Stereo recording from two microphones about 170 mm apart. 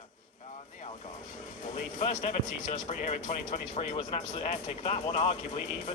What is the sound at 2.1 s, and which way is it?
Speech, 40° left (ahead or behind).